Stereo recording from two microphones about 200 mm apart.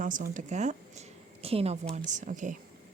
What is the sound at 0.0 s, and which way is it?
Speech, 40° right (ahead or behind).